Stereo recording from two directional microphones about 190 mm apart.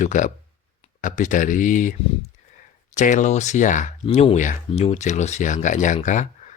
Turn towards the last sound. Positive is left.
turn(degrees=40)  # may be behind; listen again after turning